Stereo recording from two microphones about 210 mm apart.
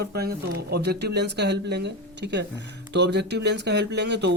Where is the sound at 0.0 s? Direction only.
50° right (ahead or behind).